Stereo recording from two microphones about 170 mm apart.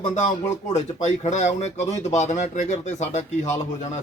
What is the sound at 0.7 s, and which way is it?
Speech, 40° left (ahead or behind).